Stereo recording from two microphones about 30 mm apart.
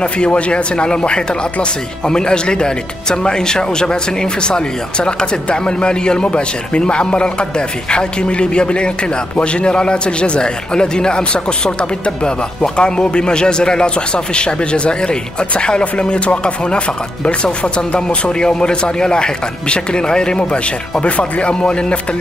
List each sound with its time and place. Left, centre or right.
0.3 s speech: left
21.0 s speech: left